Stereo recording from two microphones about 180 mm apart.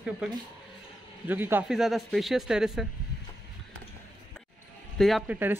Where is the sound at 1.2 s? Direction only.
10° right (ahead or behind).